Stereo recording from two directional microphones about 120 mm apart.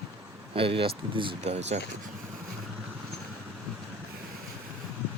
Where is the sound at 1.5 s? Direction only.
65° right (ahead or behind).